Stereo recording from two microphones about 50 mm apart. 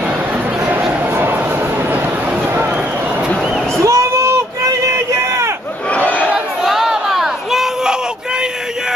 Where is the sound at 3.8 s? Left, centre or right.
Right.